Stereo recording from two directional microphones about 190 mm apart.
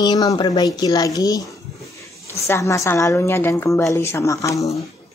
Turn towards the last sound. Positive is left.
turn(degrees=15)  # may be behind; listen again after turning